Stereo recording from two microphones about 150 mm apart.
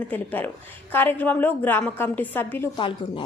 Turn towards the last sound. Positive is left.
turn(degrees=35)  # may be behind; listen again after turning